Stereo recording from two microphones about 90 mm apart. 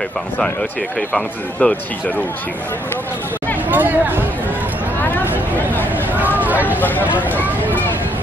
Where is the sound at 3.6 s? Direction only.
20° right (ahead or behind).